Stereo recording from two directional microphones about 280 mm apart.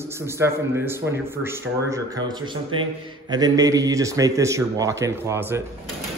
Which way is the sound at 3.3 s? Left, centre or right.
Centre.